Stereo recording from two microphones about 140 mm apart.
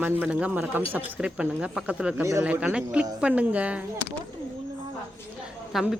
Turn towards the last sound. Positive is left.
turn(degrees=0)  # may be behind; listen again after turning